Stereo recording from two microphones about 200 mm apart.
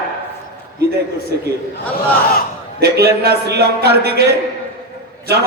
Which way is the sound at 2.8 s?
50° right (ahead or behind).